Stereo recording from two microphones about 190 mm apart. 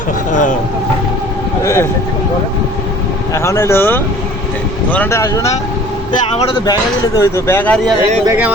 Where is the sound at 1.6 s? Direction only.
15° left (ahead or behind).